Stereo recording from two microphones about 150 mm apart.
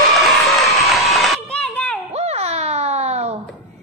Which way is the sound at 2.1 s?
45° right (ahead or behind).